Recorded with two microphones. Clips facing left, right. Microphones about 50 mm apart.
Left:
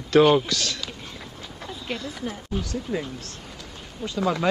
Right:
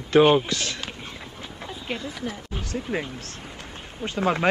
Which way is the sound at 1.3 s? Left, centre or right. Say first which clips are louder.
Right 1 dB; right.